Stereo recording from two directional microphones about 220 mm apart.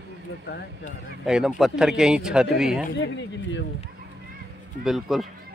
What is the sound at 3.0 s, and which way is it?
Speech, 55° left (ahead or behind).